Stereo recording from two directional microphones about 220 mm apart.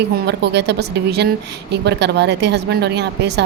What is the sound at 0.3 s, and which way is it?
A woman's voice, 50° right (ahead or behind).